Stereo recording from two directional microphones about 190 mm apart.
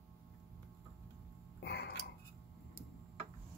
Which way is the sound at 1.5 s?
60° left (ahead or behind).